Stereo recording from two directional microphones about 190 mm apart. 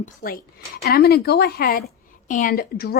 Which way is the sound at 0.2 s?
50° left (ahead or behind).